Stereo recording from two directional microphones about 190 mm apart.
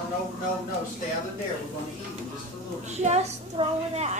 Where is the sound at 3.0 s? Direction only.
35° right (ahead or behind).